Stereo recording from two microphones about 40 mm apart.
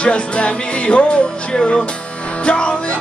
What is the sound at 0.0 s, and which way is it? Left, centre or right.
Music, left.